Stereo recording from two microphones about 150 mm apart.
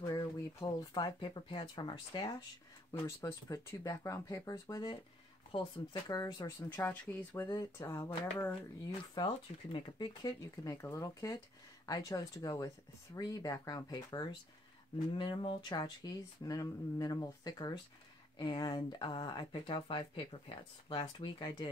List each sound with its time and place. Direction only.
0.0 s speech: 25° left (ahead or behind)
2.9 s speech: 20° left (ahead or behind)
6.8 s speech: 15° left (ahead or behind)
9.1 s speech: 35° left (ahead or behind)